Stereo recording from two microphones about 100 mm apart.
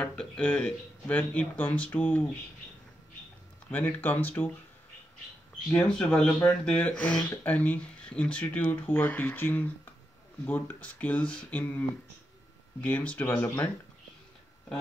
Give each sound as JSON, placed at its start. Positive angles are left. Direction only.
{"t": 0.0, "sound": "speech", "side_deg": 10}
{"t": 3.7, "sound": "speech", "side_deg": 15}
{"t": 5.7, "sound": "speech", "side_deg": 10}
{"t": 12.8, "sound": "speech", "side_deg": 15}